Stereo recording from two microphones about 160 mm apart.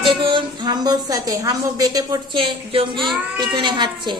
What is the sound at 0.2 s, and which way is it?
Speech, 30° right (ahead or behind).